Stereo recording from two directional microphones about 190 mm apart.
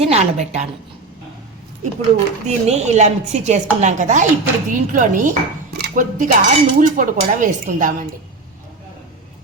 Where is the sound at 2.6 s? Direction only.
35° right (ahead or behind).